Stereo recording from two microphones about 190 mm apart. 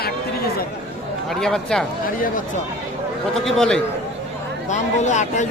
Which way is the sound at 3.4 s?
5° left (ahead or behind).